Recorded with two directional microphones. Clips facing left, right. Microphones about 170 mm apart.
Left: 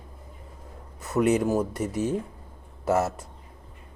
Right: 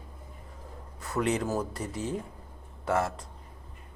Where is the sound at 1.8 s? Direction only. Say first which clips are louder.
Left 7 dB; 85° left.